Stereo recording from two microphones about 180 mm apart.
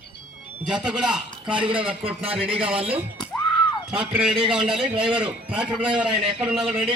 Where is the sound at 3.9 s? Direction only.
5° right (ahead or behind).